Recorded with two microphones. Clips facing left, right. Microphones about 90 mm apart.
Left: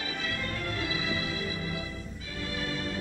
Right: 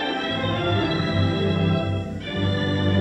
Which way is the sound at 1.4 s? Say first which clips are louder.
Right 12 dB; 60° right (ahead or behind).